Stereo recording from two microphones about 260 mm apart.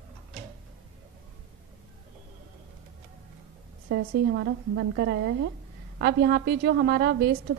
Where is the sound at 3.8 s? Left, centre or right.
Right.